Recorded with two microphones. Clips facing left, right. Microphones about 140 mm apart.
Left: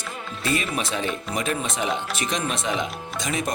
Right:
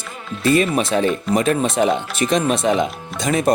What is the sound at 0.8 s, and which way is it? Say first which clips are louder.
Speech: right 9 dB; 55° right (ahead or behind).